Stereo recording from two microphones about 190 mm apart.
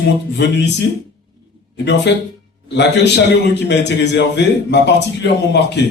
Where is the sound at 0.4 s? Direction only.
65° left (ahead or behind).